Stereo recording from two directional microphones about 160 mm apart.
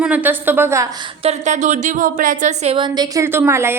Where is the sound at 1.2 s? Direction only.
45° right (ahead or behind).